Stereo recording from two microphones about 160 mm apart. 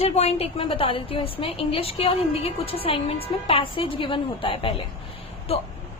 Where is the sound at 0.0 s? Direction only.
40° left (ahead or behind).